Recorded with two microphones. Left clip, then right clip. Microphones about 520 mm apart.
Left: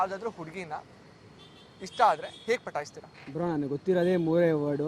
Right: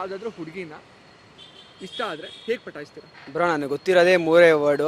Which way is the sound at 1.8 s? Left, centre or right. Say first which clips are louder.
Left 6 dB; left.